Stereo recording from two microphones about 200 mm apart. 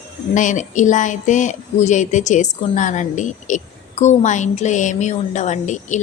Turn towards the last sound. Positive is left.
turn(degrees=35)  # may be behind; listen again after turning